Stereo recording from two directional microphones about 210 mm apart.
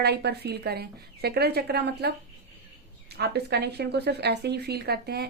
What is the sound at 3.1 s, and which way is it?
A woman's voice, 50° right (ahead or behind).